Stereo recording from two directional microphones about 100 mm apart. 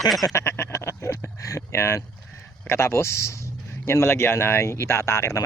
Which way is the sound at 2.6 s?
25° left (ahead or behind).